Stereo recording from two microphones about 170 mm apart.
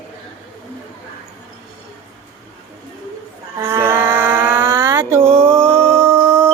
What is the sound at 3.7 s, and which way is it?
Livestock, 15° right (ahead or behind).